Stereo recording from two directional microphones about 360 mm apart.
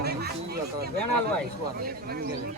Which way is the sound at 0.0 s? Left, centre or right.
Right.